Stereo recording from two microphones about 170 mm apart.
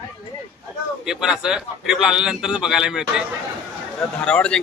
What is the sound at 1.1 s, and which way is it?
A man's voice, 5° right (ahead or behind).